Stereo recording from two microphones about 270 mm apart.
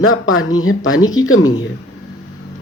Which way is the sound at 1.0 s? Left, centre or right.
Centre.